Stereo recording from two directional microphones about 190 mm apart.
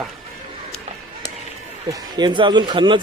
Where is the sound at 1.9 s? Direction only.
20° right (ahead or behind).